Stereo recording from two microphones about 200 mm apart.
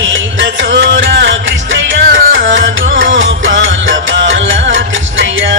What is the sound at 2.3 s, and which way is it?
Music, 70° right (ahead or behind).